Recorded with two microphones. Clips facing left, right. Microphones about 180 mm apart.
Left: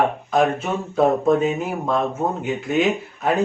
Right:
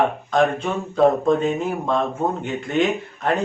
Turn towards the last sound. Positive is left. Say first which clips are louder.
# left 1 dB
turn(degrees=5)  # may be behind; listen again after turning